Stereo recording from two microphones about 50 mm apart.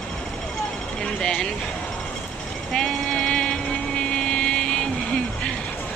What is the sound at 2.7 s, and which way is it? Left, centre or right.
Vehicle, centre.